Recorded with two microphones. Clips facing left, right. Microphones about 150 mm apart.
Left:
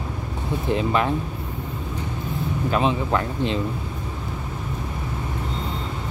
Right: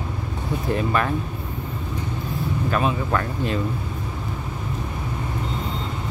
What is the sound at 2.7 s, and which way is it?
Speech, 20° left (ahead or behind).